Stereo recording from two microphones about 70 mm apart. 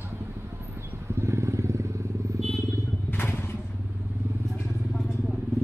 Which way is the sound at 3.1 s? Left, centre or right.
Left.